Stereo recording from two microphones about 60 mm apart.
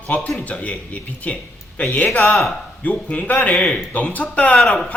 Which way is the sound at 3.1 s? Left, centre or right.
Left.